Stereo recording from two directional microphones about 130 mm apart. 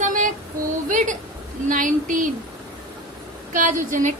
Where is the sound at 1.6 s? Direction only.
90° right.